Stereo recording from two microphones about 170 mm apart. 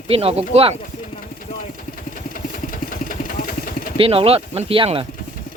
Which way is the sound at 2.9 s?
55° left (ahead or behind).